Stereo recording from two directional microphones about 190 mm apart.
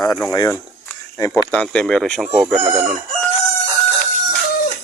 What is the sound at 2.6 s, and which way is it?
Chicken, 30° right (ahead or behind).